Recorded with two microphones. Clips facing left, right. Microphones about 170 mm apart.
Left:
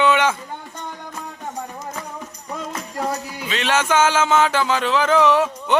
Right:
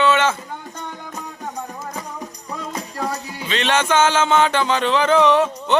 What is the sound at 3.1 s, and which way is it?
Music, 5° left (ahead or behind).